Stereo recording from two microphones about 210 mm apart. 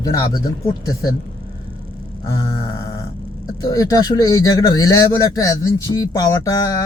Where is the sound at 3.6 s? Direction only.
15° left (ahead or behind).